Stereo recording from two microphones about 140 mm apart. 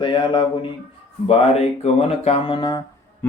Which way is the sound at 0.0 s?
35° left (ahead or behind).